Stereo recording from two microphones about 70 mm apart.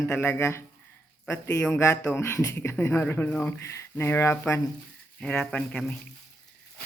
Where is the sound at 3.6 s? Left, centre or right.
Left.